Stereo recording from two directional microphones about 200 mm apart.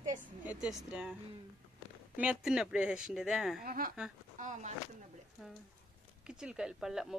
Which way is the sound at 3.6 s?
45° right (ahead or behind).